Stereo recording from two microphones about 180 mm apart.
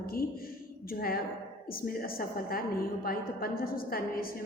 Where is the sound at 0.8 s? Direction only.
55° left (ahead or behind).